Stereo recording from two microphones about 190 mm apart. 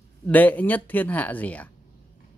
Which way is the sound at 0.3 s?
10° left (ahead or behind).